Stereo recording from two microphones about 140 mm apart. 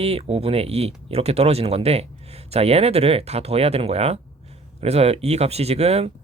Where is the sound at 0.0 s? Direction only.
45° right (ahead or behind).